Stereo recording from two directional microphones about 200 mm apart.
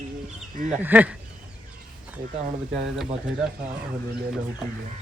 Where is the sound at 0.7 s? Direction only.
10° right (ahead or behind).